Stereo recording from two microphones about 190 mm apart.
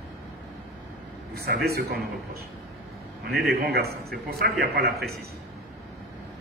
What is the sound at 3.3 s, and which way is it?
A man's voice, 55° right (ahead or behind).